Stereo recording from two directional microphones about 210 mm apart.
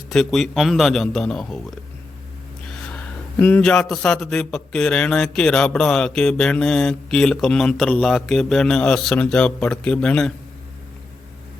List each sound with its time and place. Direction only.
0.1 s a man's voice: centre (ahead or behind)
2.6 s a man's voice: 5° left (ahead or behind)